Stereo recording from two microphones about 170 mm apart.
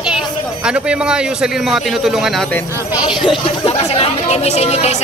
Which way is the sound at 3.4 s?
35° left (ahead or behind).